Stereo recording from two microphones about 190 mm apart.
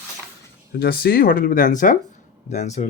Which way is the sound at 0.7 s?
55° left (ahead or behind).